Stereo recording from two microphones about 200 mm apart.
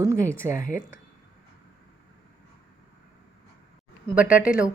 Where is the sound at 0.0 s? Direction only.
15° right (ahead or behind).